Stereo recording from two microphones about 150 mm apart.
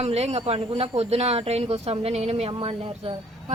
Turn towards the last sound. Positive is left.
turn(degrees=-40)  # may be behind; listen again after turning